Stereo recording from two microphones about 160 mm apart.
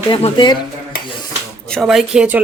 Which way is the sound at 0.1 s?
30° left (ahead or behind).